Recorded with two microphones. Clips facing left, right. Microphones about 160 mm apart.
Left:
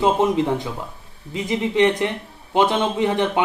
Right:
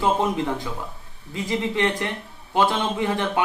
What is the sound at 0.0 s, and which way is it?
Speech, 20° left (ahead or behind).